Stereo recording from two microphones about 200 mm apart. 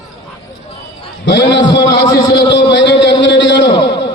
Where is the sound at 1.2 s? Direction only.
65° left (ahead or behind).